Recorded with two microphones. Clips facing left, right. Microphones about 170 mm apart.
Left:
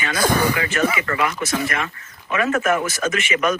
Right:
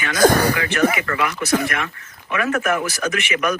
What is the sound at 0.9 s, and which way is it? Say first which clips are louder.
Speech: even; 65° right (ahead or behind).